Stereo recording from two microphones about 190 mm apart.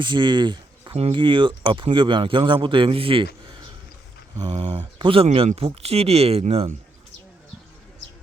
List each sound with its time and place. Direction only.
0.0 s speech: 25° right (ahead or behind)
4.5 s speech: 35° right (ahead or behind)